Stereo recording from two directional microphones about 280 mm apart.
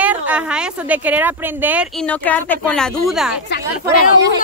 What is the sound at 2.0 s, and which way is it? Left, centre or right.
Speech, centre.